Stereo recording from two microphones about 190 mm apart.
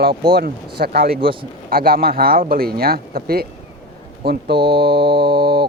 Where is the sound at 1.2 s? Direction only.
25° right (ahead or behind).